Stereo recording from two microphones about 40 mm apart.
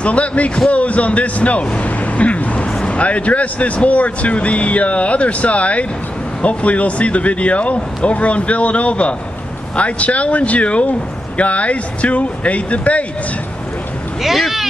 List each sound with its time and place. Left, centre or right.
0.0 s speech: left
14.2 s speech: centre